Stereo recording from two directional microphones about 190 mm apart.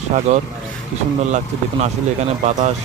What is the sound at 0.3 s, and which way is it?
Speech, 35° right (ahead or behind).